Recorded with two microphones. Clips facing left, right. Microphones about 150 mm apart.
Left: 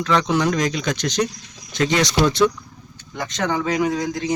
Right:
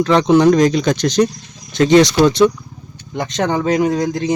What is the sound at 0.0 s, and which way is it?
Speech, 30° right (ahead or behind).